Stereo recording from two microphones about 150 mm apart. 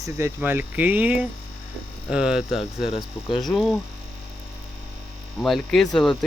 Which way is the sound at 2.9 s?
35° left (ahead or behind).